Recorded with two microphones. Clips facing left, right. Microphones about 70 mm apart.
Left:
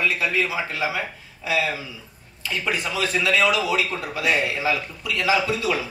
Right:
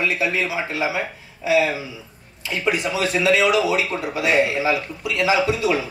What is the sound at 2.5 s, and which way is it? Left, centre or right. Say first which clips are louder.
A man's voice: right 4 dB; right.